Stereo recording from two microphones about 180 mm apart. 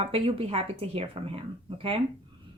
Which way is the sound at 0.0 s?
30° right (ahead or behind).